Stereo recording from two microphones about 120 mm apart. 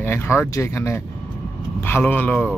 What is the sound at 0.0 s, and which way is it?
Speech, 20° left (ahead or behind).